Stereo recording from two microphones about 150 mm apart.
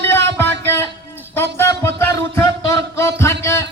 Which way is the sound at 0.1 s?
15° left (ahead or behind).